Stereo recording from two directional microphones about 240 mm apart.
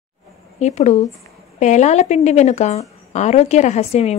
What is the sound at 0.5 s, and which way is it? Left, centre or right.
Speech, left.